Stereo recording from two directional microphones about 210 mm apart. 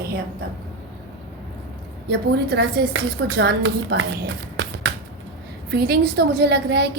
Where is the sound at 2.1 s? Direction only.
55° right (ahead or behind).